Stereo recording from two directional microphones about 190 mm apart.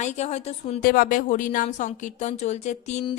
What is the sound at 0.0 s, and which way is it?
Speech, 35° left (ahead or behind).